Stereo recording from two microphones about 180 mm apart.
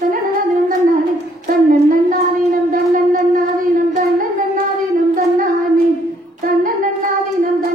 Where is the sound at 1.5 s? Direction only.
50° right (ahead or behind).